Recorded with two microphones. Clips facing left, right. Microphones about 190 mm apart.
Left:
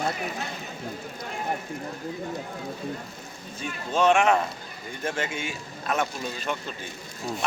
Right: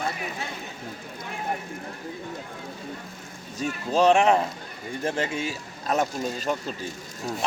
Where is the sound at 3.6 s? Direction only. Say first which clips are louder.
Right 3 dB; 40° right (ahead or behind).